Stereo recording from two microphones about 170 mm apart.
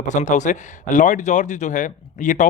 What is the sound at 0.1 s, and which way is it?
A man's voice, 45° left (ahead or behind).